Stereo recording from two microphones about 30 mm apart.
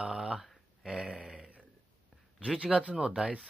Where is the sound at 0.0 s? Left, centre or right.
Right.